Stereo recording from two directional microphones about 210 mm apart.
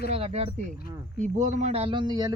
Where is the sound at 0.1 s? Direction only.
30° right (ahead or behind).